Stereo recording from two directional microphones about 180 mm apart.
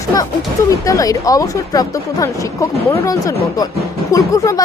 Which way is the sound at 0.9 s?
20° left (ahead or behind).